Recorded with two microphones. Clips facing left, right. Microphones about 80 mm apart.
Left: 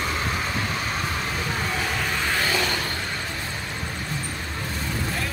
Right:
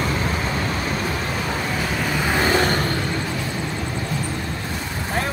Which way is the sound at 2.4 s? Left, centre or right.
Right.